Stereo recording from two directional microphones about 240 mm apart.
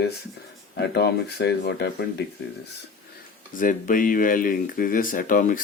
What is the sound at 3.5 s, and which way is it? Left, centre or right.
Speech, left.